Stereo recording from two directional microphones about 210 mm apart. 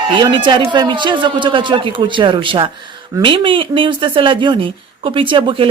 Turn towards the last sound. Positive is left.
turn(degrees=-25)  # may be behind; listen again after turning